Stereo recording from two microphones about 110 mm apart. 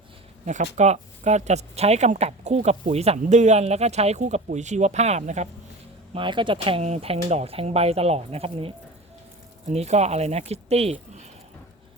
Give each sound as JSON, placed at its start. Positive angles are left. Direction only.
{"t": 0.4, "sound": "speech", "side_deg": -90}
{"t": 6.1, "sound": "speech", "side_deg": -45}
{"t": 6.8, "sound": "speech", "side_deg": -75}
{"t": 9.6, "sound": "speech", "side_deg": -85}